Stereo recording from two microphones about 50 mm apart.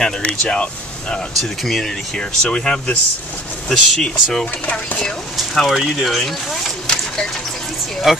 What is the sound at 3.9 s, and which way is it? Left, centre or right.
Speech, centre.